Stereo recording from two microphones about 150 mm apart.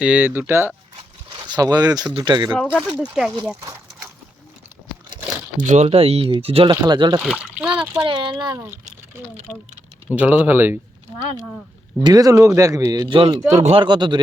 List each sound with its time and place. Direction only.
0.0 s speech: 10° right (ahead or behind)
1.5 s speech: 25° right (ahead or behind)
2.6 s a child's voice: centre (ahead or behind)
3.6 s a sound: 20° right (ahead or behind)
5.0 s crumpling: 30° right (ahead or behind)
5.5 s speech: 55° right (ahead or behind)
6.7 s speech: 30° right (ahead or behind)
7.2 s a child's voice: 5° right (ahead or behind)
8.0 s speech: 30° right (ahead or behind)
10.1 s speech: 10° right (ahead or behind)
12.0 s speech: 25° right (ahead or behind); by 13.8 s 45° right (ahead or behind)
13.8 s speech: 30° right (ahead or behind)